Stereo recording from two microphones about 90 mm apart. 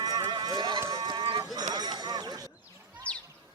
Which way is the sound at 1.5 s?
50° right (ahead or behind).